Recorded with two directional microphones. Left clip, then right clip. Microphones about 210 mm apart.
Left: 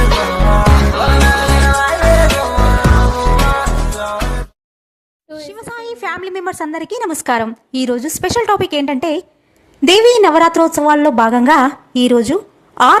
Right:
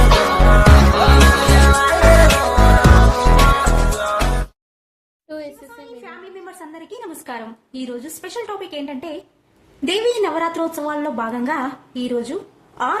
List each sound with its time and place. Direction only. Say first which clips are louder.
0.3 s music: even; centre (ahead or behind)
5.3 s a sound: even; centre (ahead or behind)
5.7 s a woman's voice: left 14 dB; 50° left (ahead or behind)